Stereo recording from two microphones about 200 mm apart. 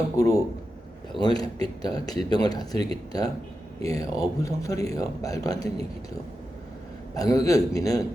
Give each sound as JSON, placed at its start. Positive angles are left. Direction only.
{"t": 0.2, "sound": "speech", "side_deg": 15}
{"t": 7.2, "sound": "speech", "side_deg": 15}